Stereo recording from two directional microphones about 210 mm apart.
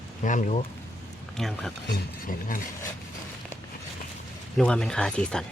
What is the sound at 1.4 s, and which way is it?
Speech, centre (ahead or behind).